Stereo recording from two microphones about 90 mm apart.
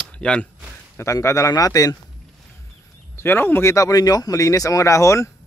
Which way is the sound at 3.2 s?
25° left (ahead or behind).